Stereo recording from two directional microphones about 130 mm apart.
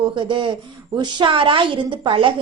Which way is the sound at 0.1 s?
40° right (ahead or behind).